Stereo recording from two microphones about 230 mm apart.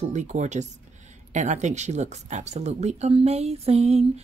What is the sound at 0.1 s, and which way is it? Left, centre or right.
A woman's voice, right.